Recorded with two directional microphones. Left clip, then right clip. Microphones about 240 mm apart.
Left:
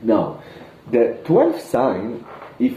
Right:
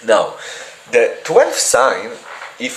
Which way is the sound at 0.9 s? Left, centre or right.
Centre.